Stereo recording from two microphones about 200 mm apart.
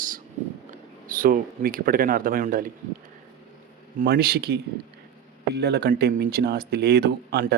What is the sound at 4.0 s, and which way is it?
Speech, 50° right (ahead or behind).